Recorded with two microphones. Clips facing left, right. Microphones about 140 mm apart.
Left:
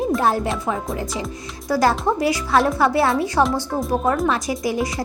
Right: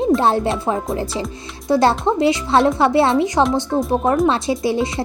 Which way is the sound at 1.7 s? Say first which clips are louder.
Right 3 dB; 25° right (ahead or behind).